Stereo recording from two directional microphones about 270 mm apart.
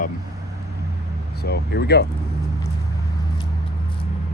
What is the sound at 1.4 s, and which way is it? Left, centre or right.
Speech, left.